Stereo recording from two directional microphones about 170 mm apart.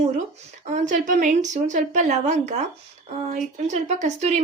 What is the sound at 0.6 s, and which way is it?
A woman's voice, 45° right (ahead or behind).